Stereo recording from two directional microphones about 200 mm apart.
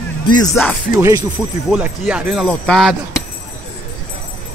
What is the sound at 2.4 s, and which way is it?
Speech, 5° left (ahead or behind).